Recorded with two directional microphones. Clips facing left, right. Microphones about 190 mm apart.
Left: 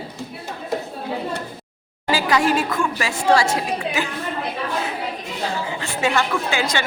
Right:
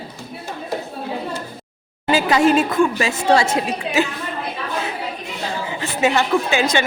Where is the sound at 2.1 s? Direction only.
25° right (ahead or behind).